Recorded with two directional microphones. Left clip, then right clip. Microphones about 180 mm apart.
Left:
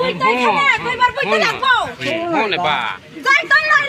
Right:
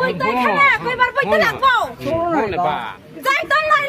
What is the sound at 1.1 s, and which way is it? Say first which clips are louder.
Speech: even; 25° right (ahead or behind).